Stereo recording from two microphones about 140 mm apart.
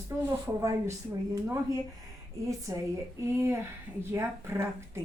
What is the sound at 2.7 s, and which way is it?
Speech, 25° right (ahead or behind).